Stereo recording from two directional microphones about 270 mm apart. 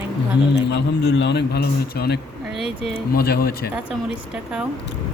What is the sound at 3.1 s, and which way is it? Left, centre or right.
Speech, left.